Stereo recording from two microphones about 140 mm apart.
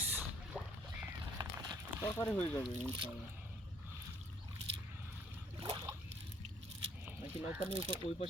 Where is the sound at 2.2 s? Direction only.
10° left (ahead or behind).